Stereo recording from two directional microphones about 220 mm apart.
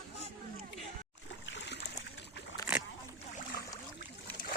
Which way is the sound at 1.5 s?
55° left (ahead or behind).